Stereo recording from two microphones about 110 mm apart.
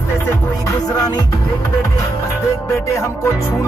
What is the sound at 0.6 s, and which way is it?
Music, 35° left (ahead or behind).